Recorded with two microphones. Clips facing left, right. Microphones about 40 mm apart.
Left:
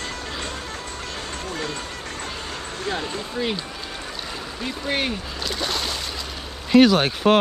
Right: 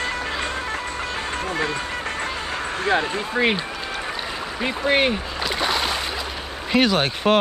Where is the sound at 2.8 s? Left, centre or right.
Right.